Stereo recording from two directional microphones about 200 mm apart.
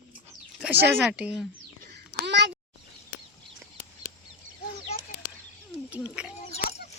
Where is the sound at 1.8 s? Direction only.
55° right (ahead or behind).